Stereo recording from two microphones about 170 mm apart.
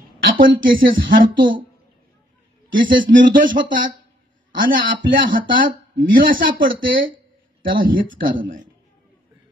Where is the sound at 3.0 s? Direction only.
55° right (ahead or behind).